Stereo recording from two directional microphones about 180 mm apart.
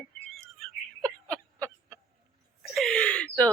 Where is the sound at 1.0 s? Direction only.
5° left (ahead or behind).